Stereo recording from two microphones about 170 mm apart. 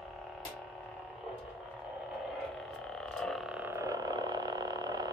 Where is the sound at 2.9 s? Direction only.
5° left (ahead or behind).